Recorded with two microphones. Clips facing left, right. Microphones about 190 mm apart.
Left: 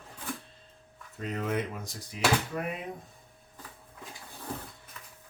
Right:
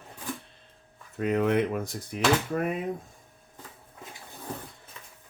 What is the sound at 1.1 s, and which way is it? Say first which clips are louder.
Speech: right 8 dB; 65° right (ahead or behind).